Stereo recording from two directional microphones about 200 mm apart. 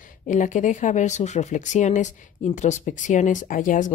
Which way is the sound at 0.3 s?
40° left (ahead or behind).